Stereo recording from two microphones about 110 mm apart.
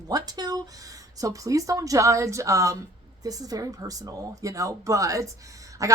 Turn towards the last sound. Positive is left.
turn(degrees=-30)  # may be behind; listen again after turning